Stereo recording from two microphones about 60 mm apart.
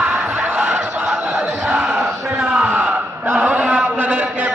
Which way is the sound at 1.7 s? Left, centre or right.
Centre.